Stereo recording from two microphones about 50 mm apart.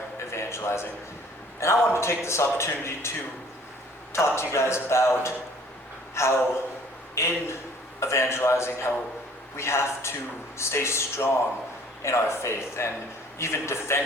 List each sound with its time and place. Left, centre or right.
0.3 s a sound: left
1.6 s a man's voice: left
4.1 s a man's voice: left
6.2 s a man's voice: left